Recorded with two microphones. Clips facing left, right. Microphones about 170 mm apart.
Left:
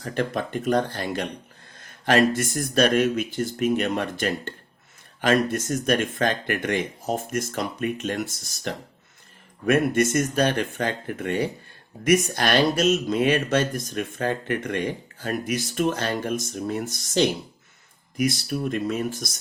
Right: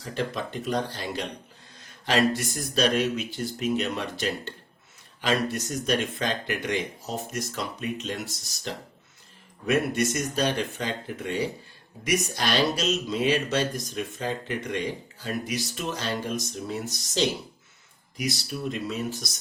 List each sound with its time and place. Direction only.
0.0 s speech: 55° left (ahead or behind)